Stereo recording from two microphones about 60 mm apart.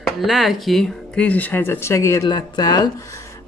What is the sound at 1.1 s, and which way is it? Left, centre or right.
Speech, left.